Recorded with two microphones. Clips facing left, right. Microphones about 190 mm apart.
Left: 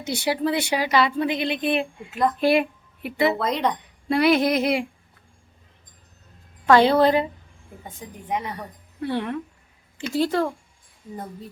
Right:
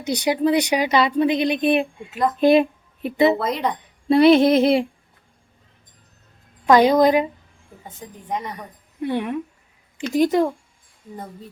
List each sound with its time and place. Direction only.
0.0 s speech: 20° right (ahead or behind)
2.0 s speech: centre (ahead or behind)
2.4 s speech: 20° right (ahead or behind)
3.3 s speech: centre (ahead or behind)
4.1 s speech: 25° right (ahead or behind)
6.7 s a woman's voice: 15° right (ahead or behind)
8.3 s a woman's voice: 10° left (ahead or behind)
8.5 s a woman's voice: 15° right (ahead or behind)